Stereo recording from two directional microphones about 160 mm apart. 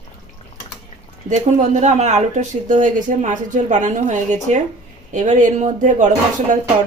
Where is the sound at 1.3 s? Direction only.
50° right (ahead or behind).